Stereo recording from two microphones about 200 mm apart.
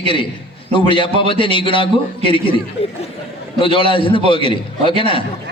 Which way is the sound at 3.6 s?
25° left (ahead or behind).